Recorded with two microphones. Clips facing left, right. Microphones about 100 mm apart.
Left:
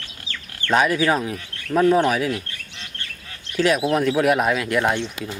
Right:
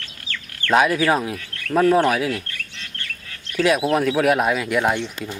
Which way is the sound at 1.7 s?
5° right (ahead or behind).